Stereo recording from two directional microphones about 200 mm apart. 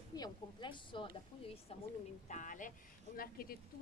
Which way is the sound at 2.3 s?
40° left (ahead or behind).